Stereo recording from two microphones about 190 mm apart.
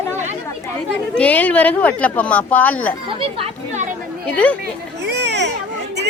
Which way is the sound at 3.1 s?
30° right (ahead or behind).